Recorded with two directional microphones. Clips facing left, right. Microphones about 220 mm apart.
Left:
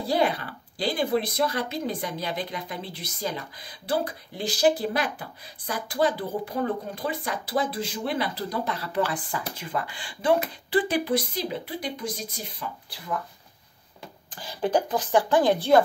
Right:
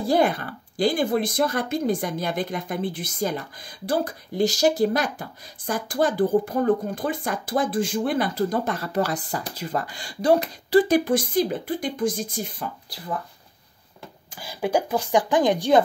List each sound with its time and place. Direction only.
0.0 s speech: 50° right (ahead or behind)
14.3 s speech: 10° right (ahead or behind)